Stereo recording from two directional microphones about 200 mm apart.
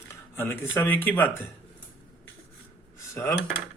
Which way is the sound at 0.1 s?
10° left (ahead or behind).